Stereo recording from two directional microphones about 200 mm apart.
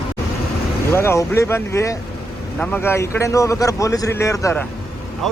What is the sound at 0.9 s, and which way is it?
Speech, 10° left (ahead or behind).